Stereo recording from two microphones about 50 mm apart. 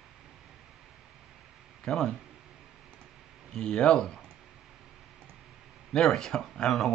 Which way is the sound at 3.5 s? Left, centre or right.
Centre.